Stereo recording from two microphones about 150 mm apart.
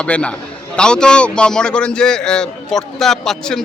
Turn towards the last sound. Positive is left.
turn(degrees=5)  # may be behind; listen again after turning